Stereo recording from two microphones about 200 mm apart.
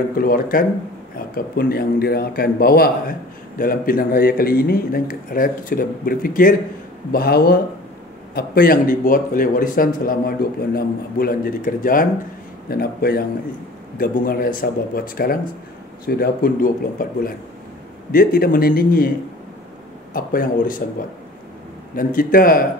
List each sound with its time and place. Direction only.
0.2 s a man's voice: 45° left (ahead or behind)
20.1 s a man's voice: 45° left (ahead or behind)
21.9 s a man's voice: 45° left (ahead or behind)